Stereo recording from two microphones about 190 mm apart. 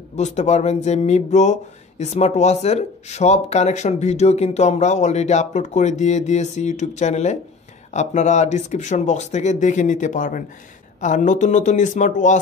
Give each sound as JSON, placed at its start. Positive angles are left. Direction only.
{"t": 0.1, "sound": "speech", "side_deg": 35}